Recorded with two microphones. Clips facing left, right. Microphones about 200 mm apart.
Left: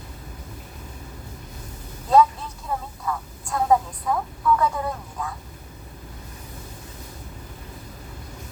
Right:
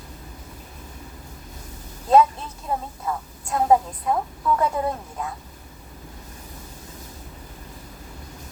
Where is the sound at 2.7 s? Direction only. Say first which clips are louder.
Right 2 dB; 25° right (ahead or behind).